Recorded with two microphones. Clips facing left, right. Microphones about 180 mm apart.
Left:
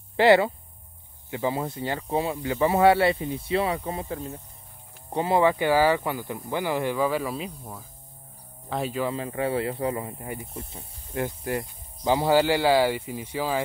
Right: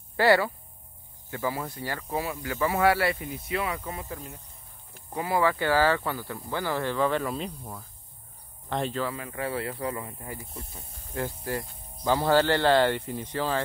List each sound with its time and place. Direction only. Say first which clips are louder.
0.2 s speech: left 4 dB; 20° left (ahead or behind); by 9.0 s 5° left (ahead or behind)
9.1 s speech: left 5 dB; 25° left (ahead or behind); by 13.6 s 10° left (ahead or behind)